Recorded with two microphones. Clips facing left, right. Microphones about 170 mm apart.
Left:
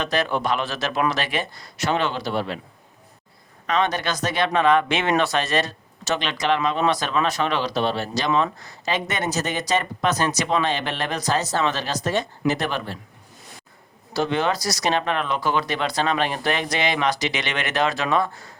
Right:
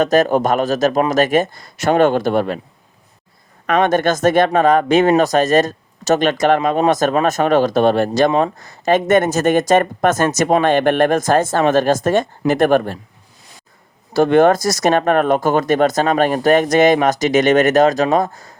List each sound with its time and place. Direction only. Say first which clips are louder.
0.0 s speech: right 10 dB; 45° right (ahead or behind)
3.7 s speech: right 8 dB; 50° right (ahead or behind)
8.3 s speech: right 5 dB; 40° right (ahead or behind)
14.1 s speech: right 11 dB; 50° right (ahead or behind)